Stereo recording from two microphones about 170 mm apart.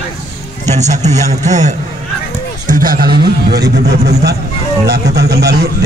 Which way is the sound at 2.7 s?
55° right (ahead or behind).